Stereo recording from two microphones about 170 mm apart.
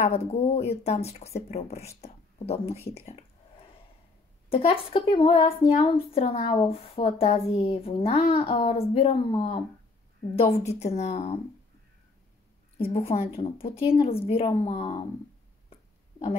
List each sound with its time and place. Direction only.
0.0 s speech: 40° left (ahead or behind)
4.5 s speech: 35° left (ahead or behind)
12.7 s speech: 35° left (ahead or behind)